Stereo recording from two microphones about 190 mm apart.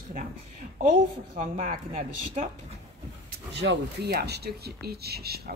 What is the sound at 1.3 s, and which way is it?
Speech, 50° right (ahead or behind).